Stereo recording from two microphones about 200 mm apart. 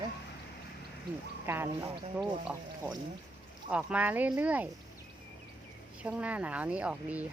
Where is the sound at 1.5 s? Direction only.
10° right (ahead or behind).